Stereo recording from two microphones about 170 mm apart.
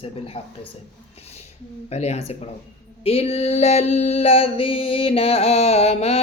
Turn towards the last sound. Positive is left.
turn(degrees=40)  # may be behind; listen again after turning